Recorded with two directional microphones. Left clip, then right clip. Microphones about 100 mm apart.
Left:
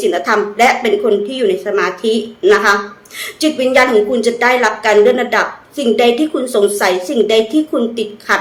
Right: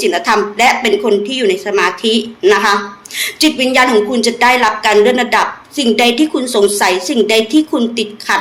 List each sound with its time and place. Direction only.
0.0 s a woman's voice: 35° left (ahead or behind)